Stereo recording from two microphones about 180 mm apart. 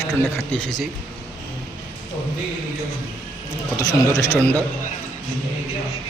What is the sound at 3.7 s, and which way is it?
Speech, 15° left (ahead or behind).